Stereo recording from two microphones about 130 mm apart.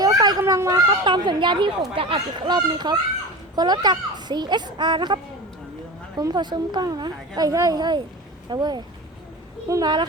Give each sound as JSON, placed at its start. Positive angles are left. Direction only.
{"t": 0.0, "sound": "a woman's voice", "side_deg": -30}